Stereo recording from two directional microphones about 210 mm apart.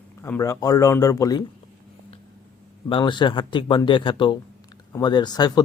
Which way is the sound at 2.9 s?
25° left (ahead or behind).